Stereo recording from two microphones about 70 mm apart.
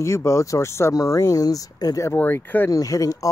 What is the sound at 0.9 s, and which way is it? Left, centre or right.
Speech, left.